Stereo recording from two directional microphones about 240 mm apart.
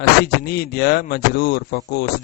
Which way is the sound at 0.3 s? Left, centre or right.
Left.